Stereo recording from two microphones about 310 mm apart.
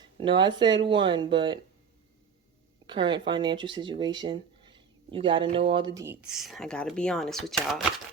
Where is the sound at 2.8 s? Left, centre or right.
Centre.